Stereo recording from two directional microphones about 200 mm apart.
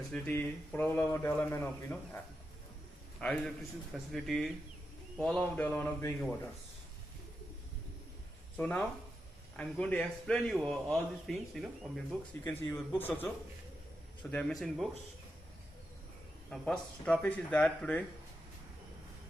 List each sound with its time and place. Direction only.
0.1 s speech: 10° left (ahead or behind)
3.2 s a man's voice: 5° left (ahead or behind)
8.5 s a man's voice: 5° left (ahead or behind)
12.5 s a man's voice: 15° left (ahead or behind)
16.5 s speech: 5° left (ahead or behind)